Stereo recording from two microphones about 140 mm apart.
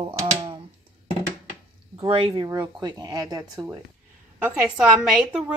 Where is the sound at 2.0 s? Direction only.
40° right (ahead or behind).